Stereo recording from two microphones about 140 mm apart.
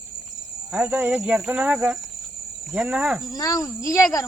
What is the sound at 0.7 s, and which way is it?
Speech, 10° right (ahead or behind).